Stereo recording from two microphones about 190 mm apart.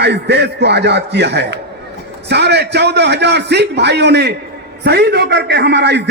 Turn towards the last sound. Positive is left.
turn(degrees=-60)  # may be behind; listen again after turning